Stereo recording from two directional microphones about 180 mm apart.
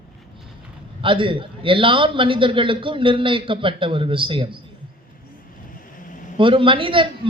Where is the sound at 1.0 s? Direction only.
30° right (ahead or behind).